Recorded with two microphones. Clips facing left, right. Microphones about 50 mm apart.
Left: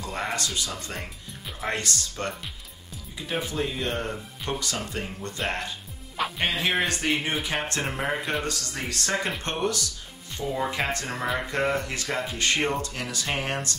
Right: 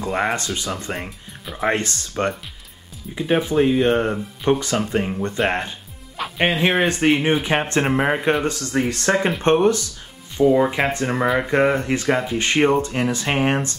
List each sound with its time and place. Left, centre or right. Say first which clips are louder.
0.0 s speech: right 8 dB; right
3.5 s speech: right 14 dB; right